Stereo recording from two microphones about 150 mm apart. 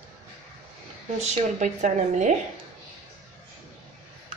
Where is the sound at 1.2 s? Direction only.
55° right (ahead or behind).